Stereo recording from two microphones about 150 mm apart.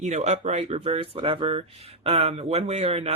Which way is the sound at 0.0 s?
50° right (ahead or behind).